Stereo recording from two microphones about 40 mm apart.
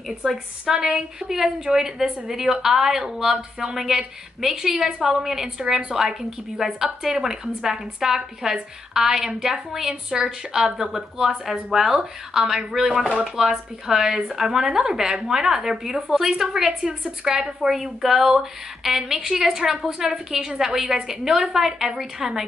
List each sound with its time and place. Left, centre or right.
0.2 s a woman's voice: centre
17.6 s a woman's voice: centre